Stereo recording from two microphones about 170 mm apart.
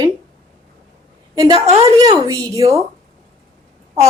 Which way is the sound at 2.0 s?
20° right (ahead or behind).